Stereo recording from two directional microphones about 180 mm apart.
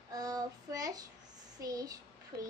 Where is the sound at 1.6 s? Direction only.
20° right (ahead or behind).